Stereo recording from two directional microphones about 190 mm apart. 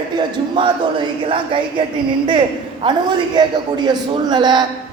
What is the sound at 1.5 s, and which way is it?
Speech, 25° right (ahead or behind).